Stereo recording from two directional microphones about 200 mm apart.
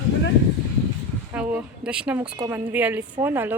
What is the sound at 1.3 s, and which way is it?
Speech, 10° right (ahead or behind).